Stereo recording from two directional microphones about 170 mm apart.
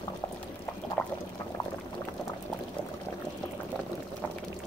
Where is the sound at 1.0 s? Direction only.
5° left (ahead or behind).